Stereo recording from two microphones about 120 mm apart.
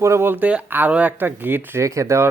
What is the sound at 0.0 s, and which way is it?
Speech, 20° right (ahead or behind).